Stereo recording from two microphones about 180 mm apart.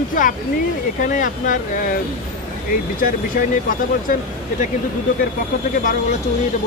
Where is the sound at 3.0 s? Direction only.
50° left (ahead or behind).